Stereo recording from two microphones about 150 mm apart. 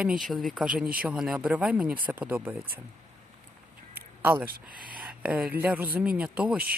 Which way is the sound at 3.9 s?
15° right (ahead or behind).